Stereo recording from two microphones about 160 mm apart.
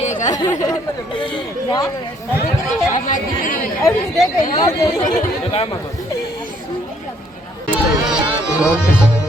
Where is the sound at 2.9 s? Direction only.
55° left (ahead or behind).